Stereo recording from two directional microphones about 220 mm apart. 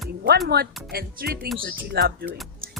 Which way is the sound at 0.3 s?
45° right (ahead or behind).